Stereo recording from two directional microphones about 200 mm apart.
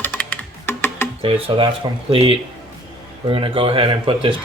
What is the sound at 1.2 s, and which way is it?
Speech, 30° right (ahead or behind).